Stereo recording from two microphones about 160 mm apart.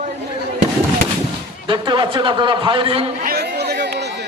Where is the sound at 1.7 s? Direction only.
30° right (ahead or behind).